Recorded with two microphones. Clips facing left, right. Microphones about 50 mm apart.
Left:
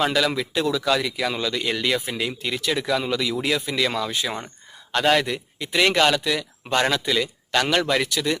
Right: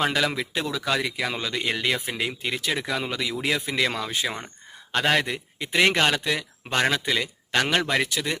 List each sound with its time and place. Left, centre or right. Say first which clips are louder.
0.0 s a man's voice: left 2 dB; right
4.3 s speech: left 3 dB; centre
4.9 s a man's voice: left 3 dB; right